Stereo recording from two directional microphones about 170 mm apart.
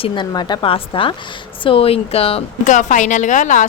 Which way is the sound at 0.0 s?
25° left (ahead or behind).